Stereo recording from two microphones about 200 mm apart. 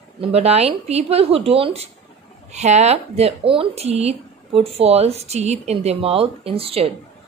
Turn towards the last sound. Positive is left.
turn(degrees=-30)  # may be behind; listen again after turning